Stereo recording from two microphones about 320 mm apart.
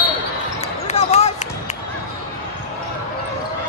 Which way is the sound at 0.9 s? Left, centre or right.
Centre.